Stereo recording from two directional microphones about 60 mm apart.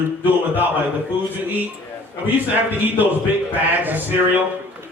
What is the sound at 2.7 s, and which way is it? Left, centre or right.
Speech, right.